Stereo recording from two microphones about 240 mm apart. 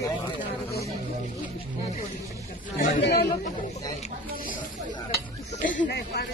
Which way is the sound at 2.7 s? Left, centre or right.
Left.